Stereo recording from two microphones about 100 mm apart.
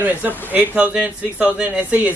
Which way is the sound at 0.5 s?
15° right (ahead or behind).